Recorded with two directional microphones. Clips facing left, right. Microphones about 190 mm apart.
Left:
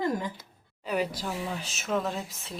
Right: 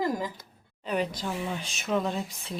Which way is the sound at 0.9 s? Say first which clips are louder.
Even; 5° left (ahead or behind).